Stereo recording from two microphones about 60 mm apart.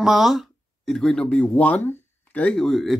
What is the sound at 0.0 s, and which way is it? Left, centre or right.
Speech, centre.